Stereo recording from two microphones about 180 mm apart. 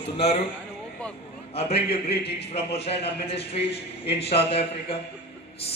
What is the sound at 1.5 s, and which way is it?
Speech, 35° left (ahead or behind).